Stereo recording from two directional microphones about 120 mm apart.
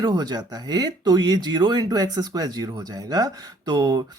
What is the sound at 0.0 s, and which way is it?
Speech, 35° right (ahead or behind).